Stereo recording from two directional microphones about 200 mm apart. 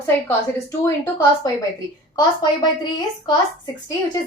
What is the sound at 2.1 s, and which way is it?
Speech, 20° left (ahead or behind).